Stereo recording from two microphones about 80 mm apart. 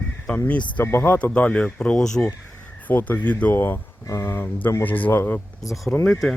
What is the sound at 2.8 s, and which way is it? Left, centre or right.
Speech, left.